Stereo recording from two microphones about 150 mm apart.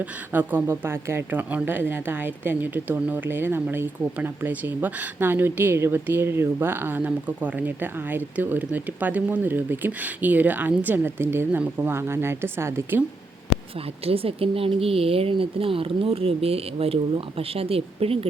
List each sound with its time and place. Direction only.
0.0 s speech: 15° right (ahead or behind)
14.0 s speech: 40° right (ahead or behind)